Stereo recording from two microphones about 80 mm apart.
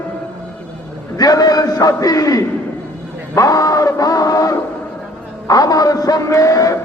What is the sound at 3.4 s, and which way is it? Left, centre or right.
Music, left.